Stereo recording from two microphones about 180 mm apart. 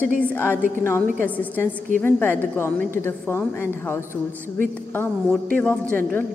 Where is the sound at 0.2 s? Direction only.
10° left (ahead or behind).